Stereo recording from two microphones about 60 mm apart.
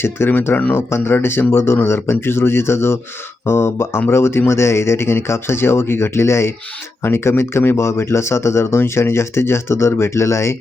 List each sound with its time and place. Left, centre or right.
0.0 s speech: left